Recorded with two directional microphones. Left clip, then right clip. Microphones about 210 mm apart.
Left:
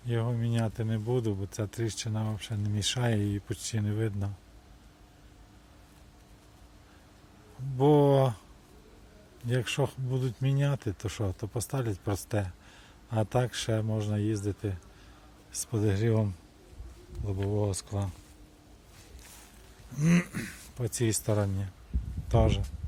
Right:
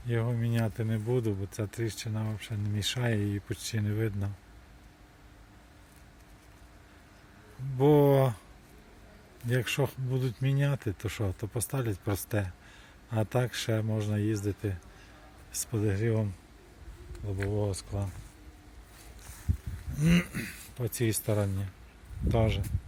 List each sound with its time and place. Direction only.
0.1 s speech: centre (ahead or behind)
7.8 s speech: 5° left (ahead or behind)
9.5 s speech: centre (ahead or behind)
15.8 s speech: 15° left (ahead or behind)
20.0 s speech: 10° left (ahead or behind)